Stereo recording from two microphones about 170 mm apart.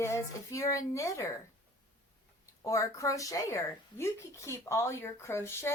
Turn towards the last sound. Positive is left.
turn(degrees=15)  # may be behind; listen again after turning